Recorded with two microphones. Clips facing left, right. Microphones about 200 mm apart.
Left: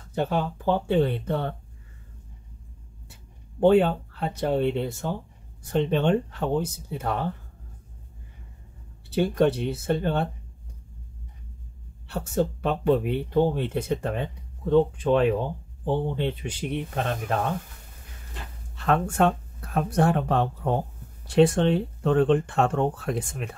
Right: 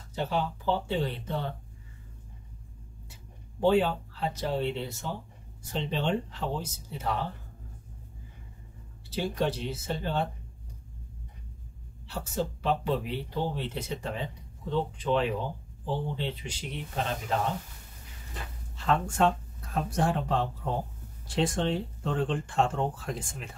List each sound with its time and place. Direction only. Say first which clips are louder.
0.1 s speech: left 4 dB; 55° left (ahead or behind)
3.1 s speech: even; 55° left (ahead or behind)
9.1 s speech: left 8 dB; 55° left (ahead or behind)
12.1 s speech: left 7 dB; 55° left (ahead or behind)
18.8 s speech: left 4 dB; 60° left (ahead or behind)